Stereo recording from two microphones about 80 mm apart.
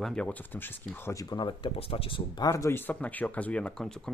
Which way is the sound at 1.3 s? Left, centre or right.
Left.